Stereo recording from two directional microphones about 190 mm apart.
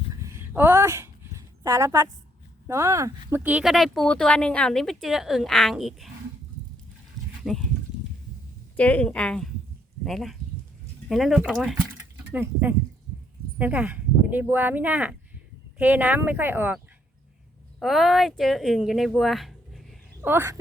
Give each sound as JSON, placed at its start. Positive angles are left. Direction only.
{"t": 0.2, "sound": "a sound", "side_deg": -15}
{"t": 1.6, "sound": "speech", "side_deg": -15}
{"t": 7.4, "sound": "speech", "side_deg": 0}
{"t": 8.7, "sound": "speech", "side_deg": 5}
{"t": 20.2, "sound": "speech", "side_deg": -15}